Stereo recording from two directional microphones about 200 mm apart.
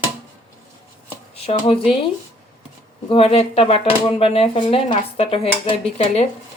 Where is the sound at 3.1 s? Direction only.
30° left (ahead or behind).